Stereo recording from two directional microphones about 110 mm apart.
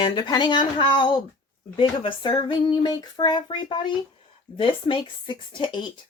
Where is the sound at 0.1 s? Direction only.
40° left (ahead or behind).